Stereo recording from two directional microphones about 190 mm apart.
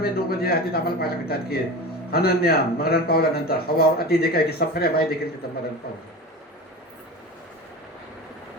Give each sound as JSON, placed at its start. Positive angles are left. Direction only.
{"t": 0.0, "sound": "a man's voice", "side_deg": 55}